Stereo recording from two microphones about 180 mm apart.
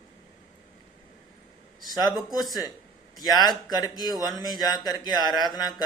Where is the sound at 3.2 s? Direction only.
25° left (ahead or behind).